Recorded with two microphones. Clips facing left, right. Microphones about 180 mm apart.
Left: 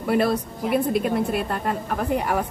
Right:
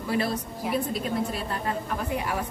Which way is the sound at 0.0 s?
60° left (ahead or behind).